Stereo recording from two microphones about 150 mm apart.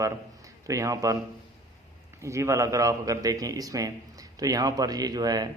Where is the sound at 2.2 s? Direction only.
20° right (ahead or behind).